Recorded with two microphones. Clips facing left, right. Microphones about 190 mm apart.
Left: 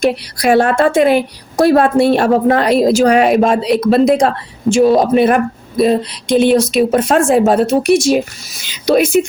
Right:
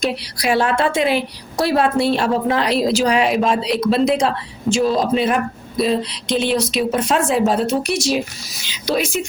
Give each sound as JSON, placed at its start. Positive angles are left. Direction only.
{"t": 0.0, "sound": "a woman's voice", "side_deg": 50}